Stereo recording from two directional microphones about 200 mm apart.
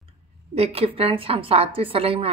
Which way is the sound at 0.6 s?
30° right (ahead or behind).